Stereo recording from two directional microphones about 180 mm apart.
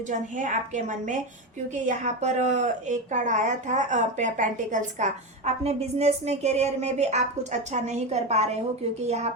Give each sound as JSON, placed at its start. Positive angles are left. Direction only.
{"t": 0.1, "sound": "a woman's voice", "side_deg": -45}